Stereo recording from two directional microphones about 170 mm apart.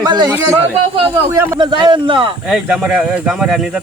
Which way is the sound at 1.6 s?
30° right (ahead or behind).